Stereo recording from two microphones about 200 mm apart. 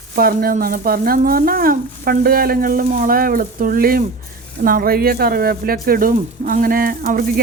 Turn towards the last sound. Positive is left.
turn(degrees=-45)  # may be behind; listen again after turning